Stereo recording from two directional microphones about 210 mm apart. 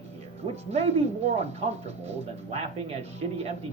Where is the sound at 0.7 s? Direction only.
30° right (ahead or behind).